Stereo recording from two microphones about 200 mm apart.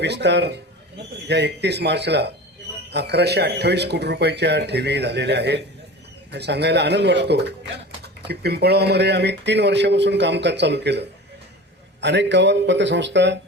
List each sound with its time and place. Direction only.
0.0 s speech: 60° right (ahead or behind)